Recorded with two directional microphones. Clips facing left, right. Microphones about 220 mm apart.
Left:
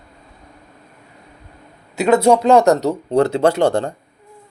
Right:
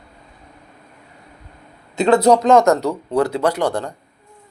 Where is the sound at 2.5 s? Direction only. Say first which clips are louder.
Left 1 dB; 35° left (ahead or behind).